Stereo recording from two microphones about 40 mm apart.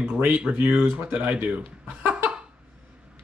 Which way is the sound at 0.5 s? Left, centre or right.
Right.